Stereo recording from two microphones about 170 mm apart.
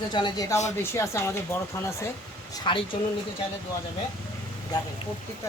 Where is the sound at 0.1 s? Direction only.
25° left (ahead or behind).